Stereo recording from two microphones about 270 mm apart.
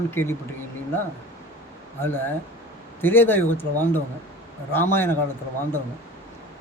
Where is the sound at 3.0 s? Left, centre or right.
Centre.